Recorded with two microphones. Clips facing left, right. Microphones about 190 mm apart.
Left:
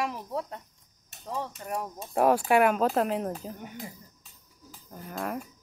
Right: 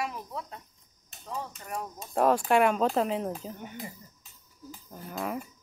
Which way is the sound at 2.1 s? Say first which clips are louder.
Left 1 dB; 5° left (ahead or behind).